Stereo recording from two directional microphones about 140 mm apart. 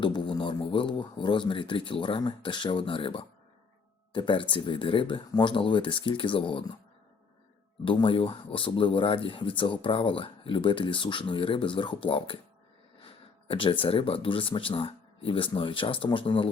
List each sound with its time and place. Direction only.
0.0 s speech: 35° left (ahead or behind)
7.9 s speech: 40° left (ahead or behind)